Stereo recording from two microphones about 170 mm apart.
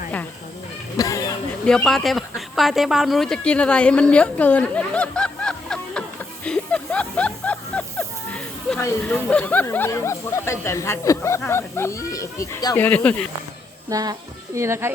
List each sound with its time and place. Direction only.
0.9 s speech: 20° left (ahead or behind)
1.6 s speech: centre (ahead or behind); by 12.8 s 20° left (ahead or behind)
12.8 s speech: 10° left (ahead or behind)
13.9 s a woman's voice: 20° right (ahead or behind)